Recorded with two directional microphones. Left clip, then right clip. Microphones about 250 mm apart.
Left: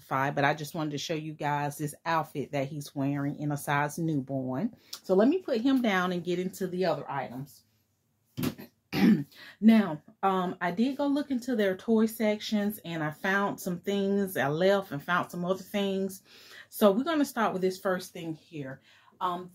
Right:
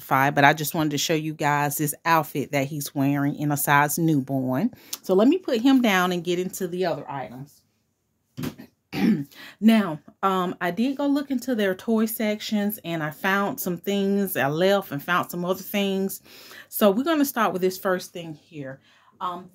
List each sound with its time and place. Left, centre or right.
0.1 s speech: right
8.9 s throat clearing: centre
9.4 s speech: right
18.5 s speech: right